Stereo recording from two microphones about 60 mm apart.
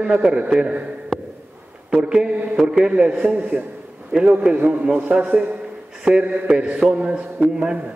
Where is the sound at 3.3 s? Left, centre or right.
Right.